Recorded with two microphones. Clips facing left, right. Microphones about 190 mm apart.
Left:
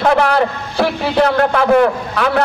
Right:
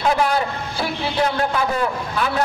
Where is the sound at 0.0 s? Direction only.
65° left (ahead or behind).